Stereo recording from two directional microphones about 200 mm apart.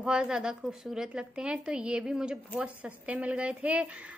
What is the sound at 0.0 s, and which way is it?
A woman's voice, 5° right (ahead or behind).